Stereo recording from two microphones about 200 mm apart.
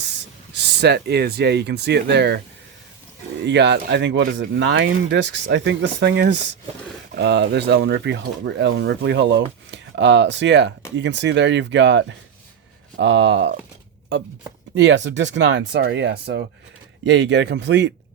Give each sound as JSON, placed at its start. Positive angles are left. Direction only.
{"t": 0.5, "sound": "speech", "side_deg": -55}
{"t": 3.4, "sound": "speech", "side_deg": -60}
{"t": 14.8, "sound": "speech", "side_deg": -60}